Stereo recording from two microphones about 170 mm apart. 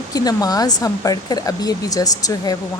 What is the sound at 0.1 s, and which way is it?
Speech, 20° left (ahead or behind).